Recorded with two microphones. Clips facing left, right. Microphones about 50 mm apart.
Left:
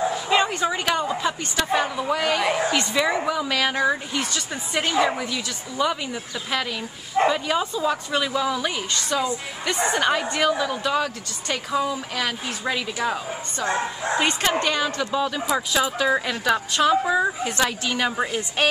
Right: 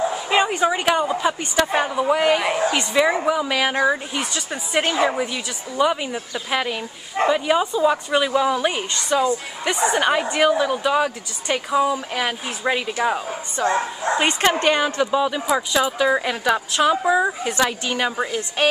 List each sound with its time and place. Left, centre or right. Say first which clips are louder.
0.1 s a woman's voice: right 2 dB; centre
15.0 s a woman's voice: right 4 dB; centre
15.4 s a woman's voice: right 3 dB; centre